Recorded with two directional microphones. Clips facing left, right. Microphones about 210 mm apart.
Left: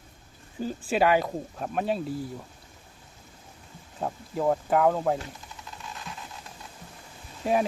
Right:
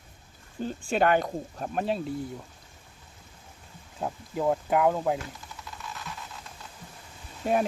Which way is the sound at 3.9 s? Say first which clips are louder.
Left 1 dB; centre (ahead or behind).